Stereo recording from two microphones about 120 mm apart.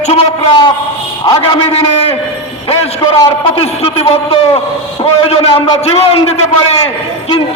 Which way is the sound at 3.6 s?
55° left (ahead or behind).